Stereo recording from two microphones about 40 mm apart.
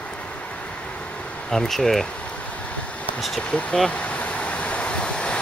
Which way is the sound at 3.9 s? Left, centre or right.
Left.